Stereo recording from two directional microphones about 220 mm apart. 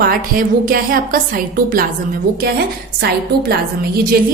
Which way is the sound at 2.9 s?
45° right (ahead or behind).